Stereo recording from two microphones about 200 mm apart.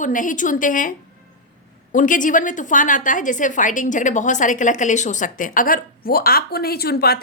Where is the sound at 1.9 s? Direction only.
40° left (ahead or behind).